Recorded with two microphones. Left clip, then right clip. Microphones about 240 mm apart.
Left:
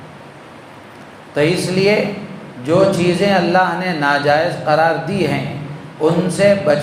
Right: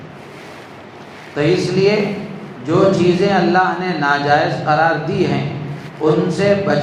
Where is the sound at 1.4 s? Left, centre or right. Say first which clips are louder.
Even; left.